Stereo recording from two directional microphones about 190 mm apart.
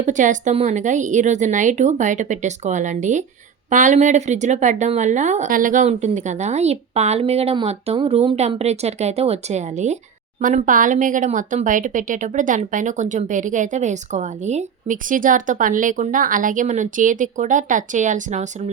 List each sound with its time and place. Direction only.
0.0 s speech: 40° right (ahead or behind)